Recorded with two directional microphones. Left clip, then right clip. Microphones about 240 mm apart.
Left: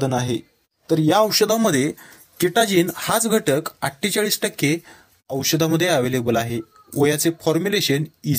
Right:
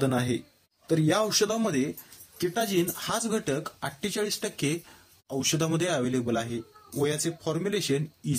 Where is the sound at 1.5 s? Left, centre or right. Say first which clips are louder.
Left 9 dB; left.